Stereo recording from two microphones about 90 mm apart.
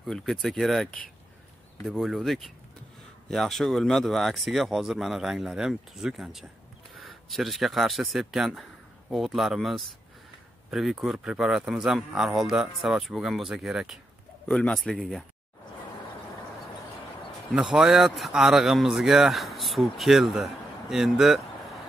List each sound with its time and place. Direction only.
0.0 s a man's voice: 5° left (ahead or behind)
14.5 s speech: 10° left (ahead or behind)
14.8 s a man's voice: centre (ahead or behind)
17.6 s a man's voice: 5° right (ahead or behind)